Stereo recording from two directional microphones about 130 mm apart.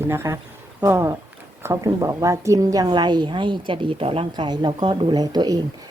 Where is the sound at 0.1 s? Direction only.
20° right (ahead or behind).